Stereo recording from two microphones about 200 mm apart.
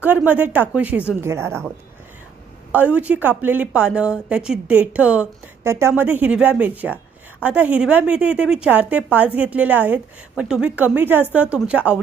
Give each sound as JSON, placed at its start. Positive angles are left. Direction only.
{"t": 0.0, "sound": "a woman's voice", "side_deg": -10}
{"t": 2.7, "sound": "a woman's voice", "side_deg": -5}